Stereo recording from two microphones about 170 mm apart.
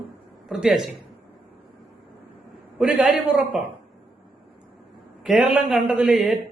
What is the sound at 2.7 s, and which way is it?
Speech, 5° right (ahead or behind).